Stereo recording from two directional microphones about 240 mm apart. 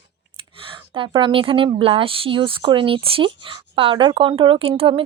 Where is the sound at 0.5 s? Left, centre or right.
Right.